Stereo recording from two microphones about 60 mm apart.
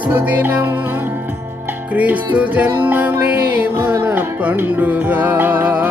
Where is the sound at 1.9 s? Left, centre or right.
Right.